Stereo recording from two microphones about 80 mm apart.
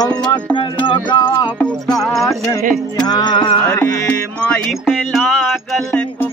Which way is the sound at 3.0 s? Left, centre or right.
Left.